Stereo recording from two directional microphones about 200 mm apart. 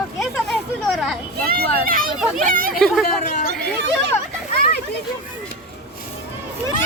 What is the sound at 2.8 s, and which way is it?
Speech, centre (ahead or behind).